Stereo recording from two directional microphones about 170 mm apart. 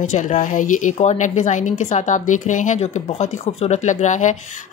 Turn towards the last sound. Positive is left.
turn(degrees=45)  # may be behind; listen again after turning